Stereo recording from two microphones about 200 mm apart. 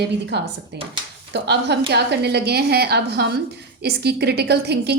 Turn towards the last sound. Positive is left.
turn(degrees=-55)  # may be behind; listen again after turning